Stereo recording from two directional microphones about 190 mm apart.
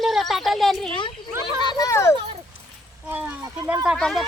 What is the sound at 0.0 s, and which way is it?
Speech, centre (ahead or behind).